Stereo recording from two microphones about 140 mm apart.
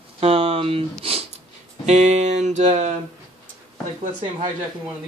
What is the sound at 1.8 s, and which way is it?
Music, 50° right (ahead or behind).